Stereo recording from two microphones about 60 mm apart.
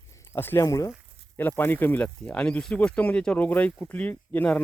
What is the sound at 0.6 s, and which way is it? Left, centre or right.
Speech, left.